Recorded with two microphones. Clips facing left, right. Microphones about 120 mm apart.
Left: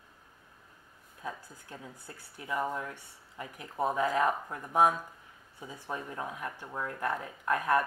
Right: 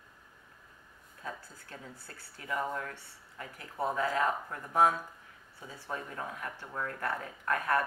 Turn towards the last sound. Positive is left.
turn(degrees=15)  # may be behind; listen again after turning